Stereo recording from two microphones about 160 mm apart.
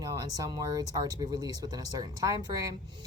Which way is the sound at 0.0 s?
25° right (ahead or behind).